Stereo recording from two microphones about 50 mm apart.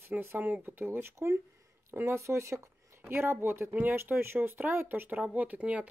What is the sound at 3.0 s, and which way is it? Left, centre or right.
Speech, right.